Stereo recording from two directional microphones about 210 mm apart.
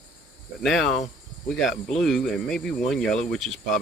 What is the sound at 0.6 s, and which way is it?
Speech, centre (ahead or behind).